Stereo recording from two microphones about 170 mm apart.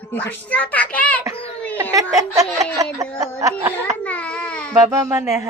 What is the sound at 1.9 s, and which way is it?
Speech, 20° right (ahead or behind).